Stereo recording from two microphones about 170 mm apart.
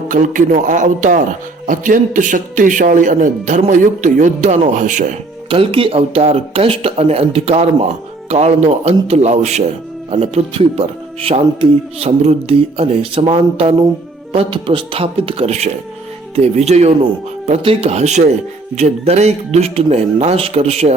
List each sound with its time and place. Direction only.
0.1 s a man's voice: 45° right (ahead or behind)
5.5 s speech: 30° right (ahead or behind)